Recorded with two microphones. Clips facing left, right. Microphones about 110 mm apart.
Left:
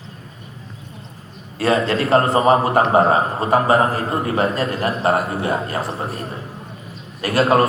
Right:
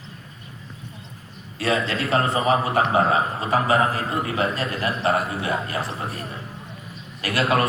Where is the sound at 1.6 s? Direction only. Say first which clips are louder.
Left 6 dB; 40° left (ahead or behind).